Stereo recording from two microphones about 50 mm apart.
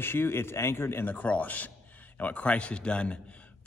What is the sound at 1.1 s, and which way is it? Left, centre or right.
A man's voice, left.